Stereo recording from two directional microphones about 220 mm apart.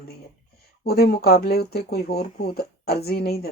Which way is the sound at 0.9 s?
45° left (ahead or behind).